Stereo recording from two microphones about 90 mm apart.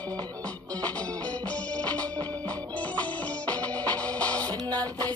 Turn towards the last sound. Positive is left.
turn(degrees=15)  # may be behind; listen again after turning